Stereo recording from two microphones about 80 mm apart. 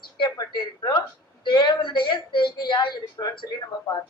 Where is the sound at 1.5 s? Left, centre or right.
Left.